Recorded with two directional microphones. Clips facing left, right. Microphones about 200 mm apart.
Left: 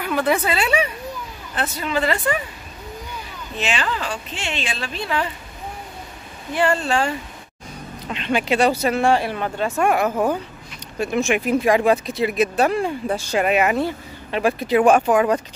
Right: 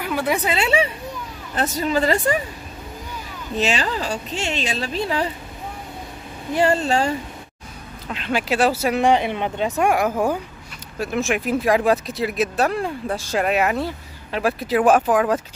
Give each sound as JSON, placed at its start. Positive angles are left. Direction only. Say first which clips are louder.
{"t": 0.0, "sound": "a woman's voice", "louder": "left 2 dB", "side_deg": -10}
{"t": 0.6, "sound": "speech", "louder": "right 1 dB", "side_deg": -25}
{"t": 1.5, "sound": "a woman's voice", "louder": "right 3 dB", "side_deg": -40}
{"t": 3.5, "sound": "a woman's voice", "louder": "right 3 dB", "side_deg": -40}
{"t": 6.5, "sound": "a woman's voice", "louder": "right 1 dB", "side_deg": -40}
{"t": 8.1, "sound": "speech", "louder": "left 2 dB", "side_deg": 0}
{"t": 8.9, "sound": "a woman's voice", "louder": "right 1 dB", "side_deg": -20}